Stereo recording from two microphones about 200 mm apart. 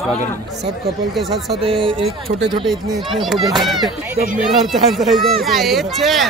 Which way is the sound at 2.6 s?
Centre (ahead or behind).